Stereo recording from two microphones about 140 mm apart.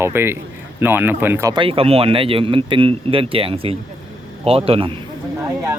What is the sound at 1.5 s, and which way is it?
A man's voice, 40° right (ahead or behind).